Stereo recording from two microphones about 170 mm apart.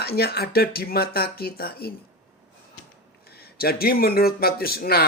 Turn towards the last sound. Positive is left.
turn(degrees=65)  # may be behind; listen again after turning